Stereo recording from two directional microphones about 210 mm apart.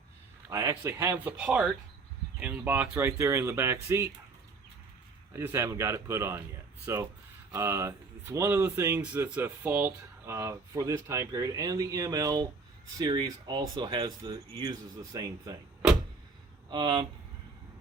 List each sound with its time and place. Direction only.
0.5 s speech: 15° right (ahead or behind)
5.3 s speech: 10° right (ahead or behind)
16.6 s speech: 20° right (ahead or behind)